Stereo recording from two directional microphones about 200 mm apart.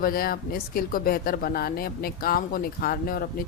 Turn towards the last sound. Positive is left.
turn(degrees=45)  # may be behind; listen again after turning